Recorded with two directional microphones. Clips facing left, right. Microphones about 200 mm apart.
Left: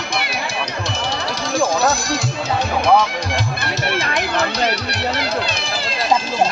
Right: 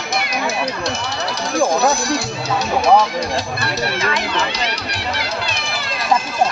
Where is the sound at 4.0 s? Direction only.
55° left (ahead or behind).